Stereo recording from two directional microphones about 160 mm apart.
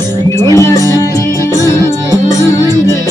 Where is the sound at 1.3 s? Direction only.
20° right (ahead or behind).